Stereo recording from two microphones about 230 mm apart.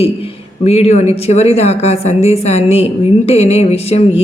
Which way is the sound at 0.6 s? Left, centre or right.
Left.